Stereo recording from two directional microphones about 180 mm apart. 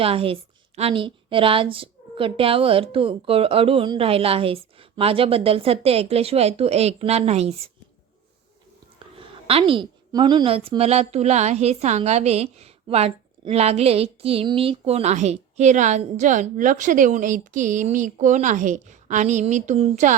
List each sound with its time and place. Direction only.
0.0 s a woman's voice: 30° right (ahead or behind)
9.1 s a woman's voice: 30° right (ahead or behind)